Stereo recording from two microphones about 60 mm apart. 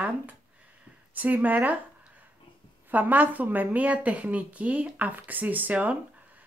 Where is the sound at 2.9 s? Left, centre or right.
Right.